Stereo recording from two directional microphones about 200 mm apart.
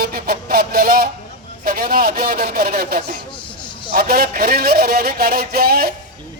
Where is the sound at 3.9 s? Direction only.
45° right (ahead or behind).